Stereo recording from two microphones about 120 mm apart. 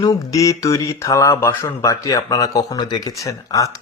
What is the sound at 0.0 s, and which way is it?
Speech, 30° left (ahead or behind).